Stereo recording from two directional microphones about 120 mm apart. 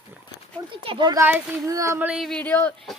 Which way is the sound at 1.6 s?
25° right (ahead or behind).